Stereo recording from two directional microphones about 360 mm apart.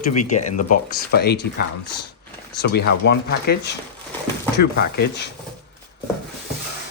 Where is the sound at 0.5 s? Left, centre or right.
Left.